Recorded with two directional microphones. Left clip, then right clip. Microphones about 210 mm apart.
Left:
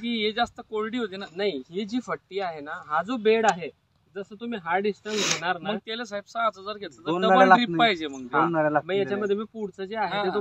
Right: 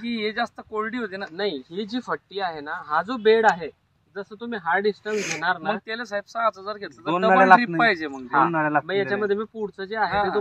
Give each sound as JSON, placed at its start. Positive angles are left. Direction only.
{"t": 0.1, "sound": "speech", "side_deg": -10}
{"t": 1.3, "sound": "speech", "side_deg": 15}
{"t": 5.9, "sound": "speech", "side_deg": -5}
{"t": 7.2, "sound": "a man's voice", "side_deg": -40}
{"t": 7.6, "sound": "speech", "side_deg": -5}
{"t": 8.5, "sound": "speech", "side_deg": -45}
{"t": 8.8, "sound": "speech", "side_deg": 15}